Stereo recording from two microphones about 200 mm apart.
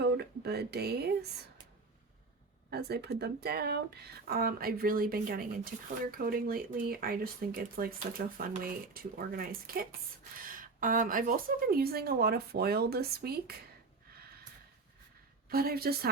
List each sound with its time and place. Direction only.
0.0 s speech: 55° right (ahead or behind)
2.6 s speech: 55° right (ahead or behind)
15.4 s speech: 50° right (ahead or behind)